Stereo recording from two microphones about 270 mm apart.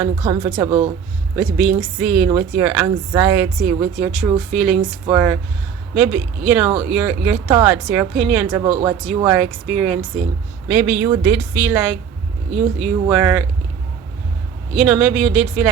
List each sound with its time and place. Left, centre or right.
0.0 s speech: centre
1.4 s speech: centre
14.8 s speech: centre